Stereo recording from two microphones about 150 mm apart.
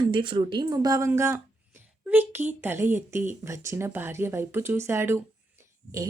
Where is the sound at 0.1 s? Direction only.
35° right (ahead or behind).